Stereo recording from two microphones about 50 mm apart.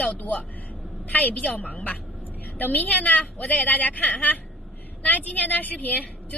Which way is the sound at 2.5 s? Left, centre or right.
Left.